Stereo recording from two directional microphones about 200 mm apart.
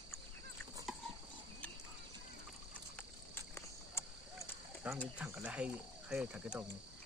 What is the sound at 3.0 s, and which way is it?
Cricket, 10° left (ahead or behind).